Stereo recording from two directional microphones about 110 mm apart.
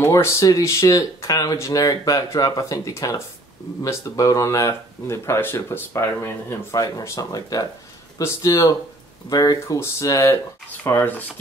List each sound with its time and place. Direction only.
0.0 s speech: 25° left (ahead or behind)
10.7 s speech: 15° left (ahead or behind)